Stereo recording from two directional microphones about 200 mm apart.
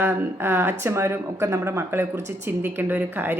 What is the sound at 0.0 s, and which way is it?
Speech, 10° right (ahead or behind).